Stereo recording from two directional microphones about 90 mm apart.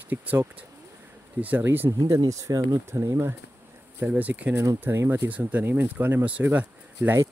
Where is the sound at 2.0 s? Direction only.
35° right (ahead or behind).